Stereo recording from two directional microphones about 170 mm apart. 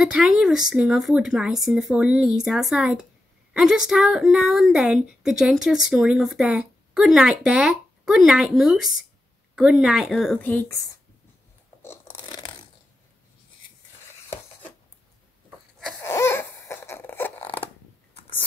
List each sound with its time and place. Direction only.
0.0 s speech: centre (ahead or behind); by 10.9 s 15° left (ahead or behind)
11.8 s crunch: 15° left (ahead or behind)
12.3 s crunch: 30° left (ahead or behind)
16.0 s a sound: 15° left (ahead or behind)